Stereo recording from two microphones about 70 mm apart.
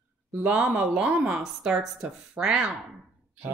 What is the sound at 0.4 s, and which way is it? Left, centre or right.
Speech, centre.